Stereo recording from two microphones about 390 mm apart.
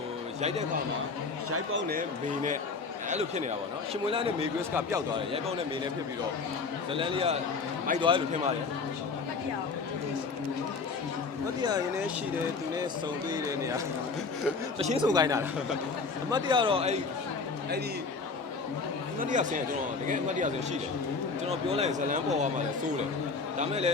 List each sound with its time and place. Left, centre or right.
1.5 s a man's voice: right
1.9 s a man's voice: centre
6.9 s a man's voice: centre
11.6 s a man's voice: centre
13.3 s a man's voice: centre
19.2 s a man's voice: centre
21.5 s a man's voice: centre
23.6 s a man's voice: centre